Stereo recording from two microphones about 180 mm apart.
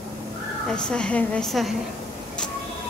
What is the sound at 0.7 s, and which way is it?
A woman's voice, 5° left (ahead or behind).